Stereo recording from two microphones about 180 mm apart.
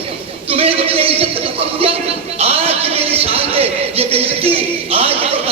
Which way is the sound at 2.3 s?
35° right (ahead or behind).